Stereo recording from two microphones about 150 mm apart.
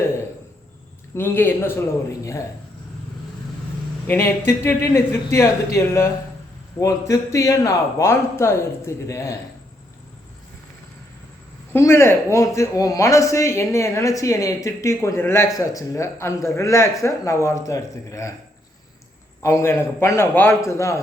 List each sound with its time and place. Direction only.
1.1 s speech: 15° left (ahead or behind)
4.0 s speech: 15° left (ahead or behind)
11.7 s speech: 15° left (ahead or behind)
19.4 s speech: 20° left (ahead or behind)